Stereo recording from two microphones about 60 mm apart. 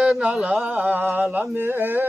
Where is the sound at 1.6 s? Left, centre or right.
Right.